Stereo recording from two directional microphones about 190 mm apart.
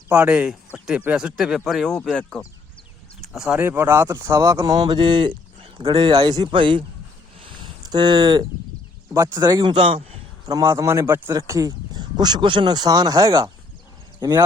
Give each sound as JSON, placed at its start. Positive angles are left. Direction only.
{"t": 0.1, "sound": "speech", "side_deg": -10}
{"t": 7.3, "sound": "a sound", "side_deg": -25}
{"t": 9.1, "sound": "speech", "side_deg": -20}
{"t": 10.5, "sound": "speech", "side_deg": -15}